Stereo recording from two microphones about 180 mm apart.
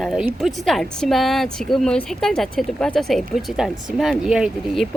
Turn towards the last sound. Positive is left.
turn(degrees=-5)  # may be behind; listen again after turning